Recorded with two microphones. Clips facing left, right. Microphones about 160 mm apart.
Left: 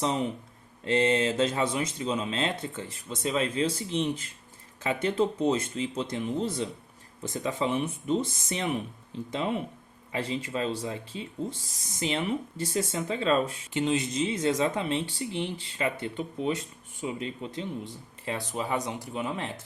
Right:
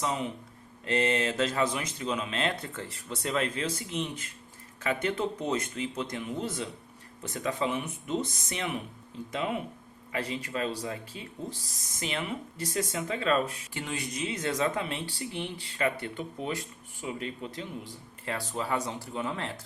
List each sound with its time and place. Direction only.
0.0 s speech: 35° left (ahead or behind); by 19.5 s 15° left (ahead or behind)